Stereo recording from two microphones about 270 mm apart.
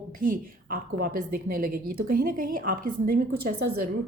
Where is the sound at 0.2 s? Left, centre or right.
Right.